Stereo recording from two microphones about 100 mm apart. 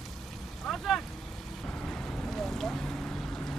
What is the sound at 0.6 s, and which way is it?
Boat, 5° left (ahead or behind).